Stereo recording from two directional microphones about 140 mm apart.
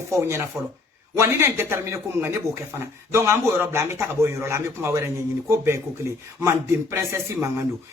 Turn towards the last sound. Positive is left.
turn(degrees=-20)  # may be behind; listen again after turning